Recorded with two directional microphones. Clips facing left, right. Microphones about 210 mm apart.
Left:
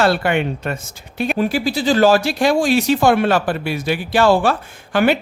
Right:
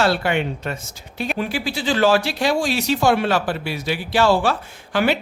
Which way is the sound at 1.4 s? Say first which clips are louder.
Left 7 dB; 40° left (ahead or behind).